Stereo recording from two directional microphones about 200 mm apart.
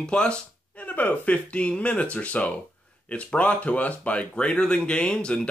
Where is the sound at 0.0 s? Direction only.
5° left (ahead or behind).